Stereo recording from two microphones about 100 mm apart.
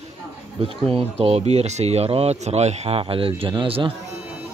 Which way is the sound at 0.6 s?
80° right.